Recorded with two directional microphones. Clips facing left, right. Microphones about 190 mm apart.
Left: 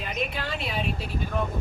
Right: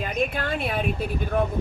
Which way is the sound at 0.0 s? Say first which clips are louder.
Right 5 dB; 50° right (ahead or behind).